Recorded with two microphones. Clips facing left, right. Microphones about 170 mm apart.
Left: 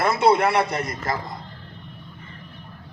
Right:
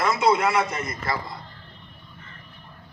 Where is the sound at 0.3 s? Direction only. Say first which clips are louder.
Left 3 dB; 60° left (ahead or behind).